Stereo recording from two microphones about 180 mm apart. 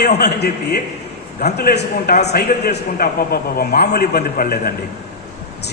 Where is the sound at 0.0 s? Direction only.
65° left (ahead or behind).